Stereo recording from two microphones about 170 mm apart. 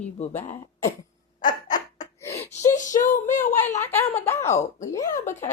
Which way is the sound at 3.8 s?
10° left (ahead or behind).